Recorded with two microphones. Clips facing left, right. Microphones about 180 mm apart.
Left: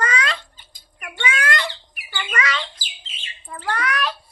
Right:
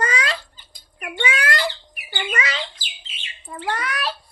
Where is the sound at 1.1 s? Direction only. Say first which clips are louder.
Right 1 dB; 30° right (ahead or behind).